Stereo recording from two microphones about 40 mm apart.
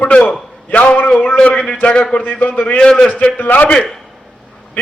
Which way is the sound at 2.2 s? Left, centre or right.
Left.